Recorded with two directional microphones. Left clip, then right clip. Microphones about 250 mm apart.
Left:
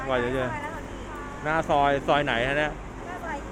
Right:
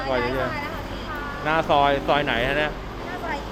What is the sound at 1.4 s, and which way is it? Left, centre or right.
Speech, centre.